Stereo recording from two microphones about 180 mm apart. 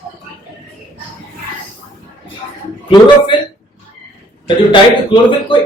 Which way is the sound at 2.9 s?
25° left (ahead or behind).